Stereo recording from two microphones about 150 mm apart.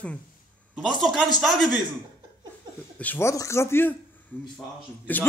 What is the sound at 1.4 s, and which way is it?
Speech, centre (ahead or behind).